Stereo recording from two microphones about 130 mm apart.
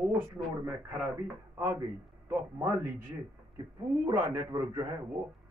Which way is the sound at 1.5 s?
20° right (ahead or behind).